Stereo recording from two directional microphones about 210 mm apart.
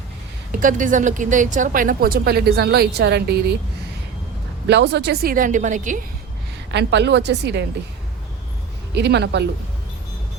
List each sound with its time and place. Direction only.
0.6 s a woman's voice: 40° right (ahead or behind)
4.7 s a woman's voice: 55° right (ahead or behind); by 6.0 s 35° right (ahead or behind)
6.7 s a woman's voice: 55° right (ahead or behind)
9.0 s a woman's voice: 55° right (ahead or behind)